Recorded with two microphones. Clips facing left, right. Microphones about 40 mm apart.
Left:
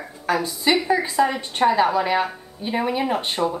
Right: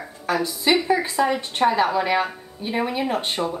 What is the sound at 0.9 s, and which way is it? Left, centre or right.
A woman's voice, centre.